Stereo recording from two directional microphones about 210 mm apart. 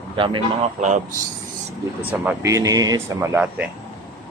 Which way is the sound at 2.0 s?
10° right (ahead or behind).